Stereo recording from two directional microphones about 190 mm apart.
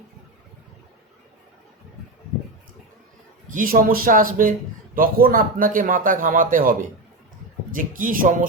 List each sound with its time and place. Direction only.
3.5 s a man's voice: 45° right (ahead or behind)